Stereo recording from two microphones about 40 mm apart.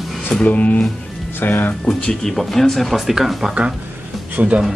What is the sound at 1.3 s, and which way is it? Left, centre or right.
Speech, left.